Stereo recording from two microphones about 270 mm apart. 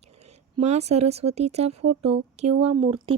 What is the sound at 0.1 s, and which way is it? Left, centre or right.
Speech, right.